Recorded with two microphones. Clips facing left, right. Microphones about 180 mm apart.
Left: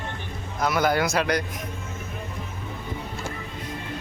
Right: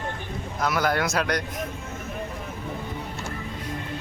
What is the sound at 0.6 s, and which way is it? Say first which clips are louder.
Speech: left 2 dB; centre (ahead or behind).